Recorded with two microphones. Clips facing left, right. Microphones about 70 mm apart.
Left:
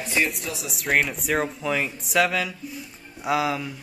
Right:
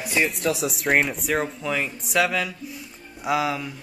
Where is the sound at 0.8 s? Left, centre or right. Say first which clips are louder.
Even; centre.